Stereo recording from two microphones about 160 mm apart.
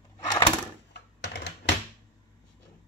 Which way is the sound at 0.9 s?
90° left.